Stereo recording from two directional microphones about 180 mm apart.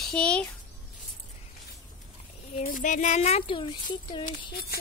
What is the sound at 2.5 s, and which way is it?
A woman's voice, 45° left (ahead or behind).